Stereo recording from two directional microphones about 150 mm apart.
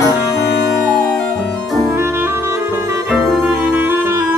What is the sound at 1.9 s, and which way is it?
Music, 15° right (ahead or behind).